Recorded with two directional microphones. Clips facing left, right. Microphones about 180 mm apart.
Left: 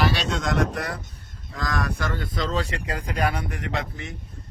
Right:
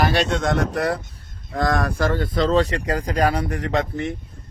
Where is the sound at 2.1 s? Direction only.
45° right (ahead or behind).